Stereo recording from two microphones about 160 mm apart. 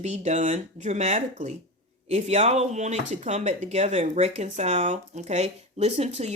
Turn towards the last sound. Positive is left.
turn(degrees=-40)  # may be behind; listen again after turning